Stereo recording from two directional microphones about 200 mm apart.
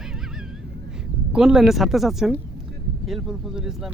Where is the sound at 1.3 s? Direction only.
5° right (ahead or behind).